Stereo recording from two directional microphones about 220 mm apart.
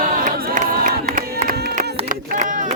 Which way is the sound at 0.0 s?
35° right (ahead or behind).